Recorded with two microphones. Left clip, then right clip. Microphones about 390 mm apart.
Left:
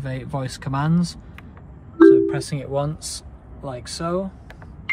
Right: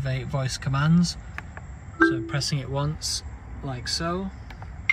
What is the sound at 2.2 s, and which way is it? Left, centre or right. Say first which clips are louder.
Speech: left 4 dB; centre.